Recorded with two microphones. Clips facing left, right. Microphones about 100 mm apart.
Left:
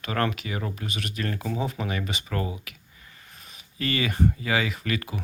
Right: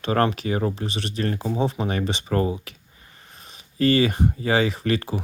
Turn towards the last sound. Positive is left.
turn(degrees=-30)  # may be behind; listen again after turning